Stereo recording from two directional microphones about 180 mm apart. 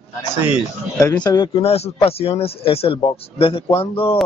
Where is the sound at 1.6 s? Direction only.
35° left (ahead or behind).